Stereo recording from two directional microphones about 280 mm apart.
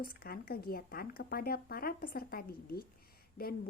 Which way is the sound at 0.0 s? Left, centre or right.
Left.